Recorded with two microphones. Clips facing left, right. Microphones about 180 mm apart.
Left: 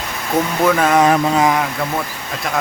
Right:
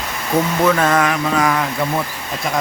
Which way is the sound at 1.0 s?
25° left (ahead or behind).